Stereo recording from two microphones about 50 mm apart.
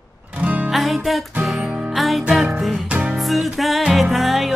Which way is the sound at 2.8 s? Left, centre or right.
Right.